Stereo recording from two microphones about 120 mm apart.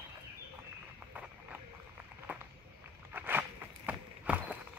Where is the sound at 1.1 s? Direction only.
10° right (ahead or behind).